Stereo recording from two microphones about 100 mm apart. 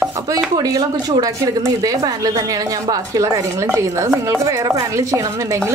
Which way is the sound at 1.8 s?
35° right (ahead or behind).